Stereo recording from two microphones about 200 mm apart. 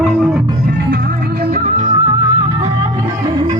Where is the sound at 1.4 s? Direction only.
40° right (ahead or behind).